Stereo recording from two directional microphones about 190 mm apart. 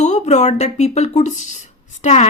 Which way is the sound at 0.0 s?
35° left (ahead or behind).